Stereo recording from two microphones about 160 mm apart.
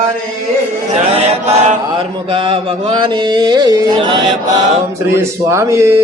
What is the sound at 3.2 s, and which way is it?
Speech, 25° right (ahead or behind).